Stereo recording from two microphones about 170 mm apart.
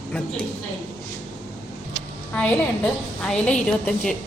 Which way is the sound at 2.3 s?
5° left (ahead or behind).